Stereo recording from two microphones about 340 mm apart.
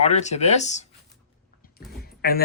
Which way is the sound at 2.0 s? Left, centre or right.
Left.